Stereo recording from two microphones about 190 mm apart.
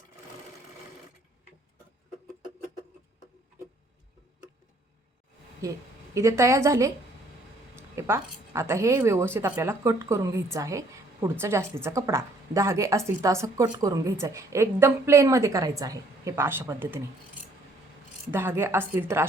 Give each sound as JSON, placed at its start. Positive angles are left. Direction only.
{"t": 5.6, "sound": "speech", "side_deg": -15}
{"t": 18.3, "sound": "speech", "side_deg": -10}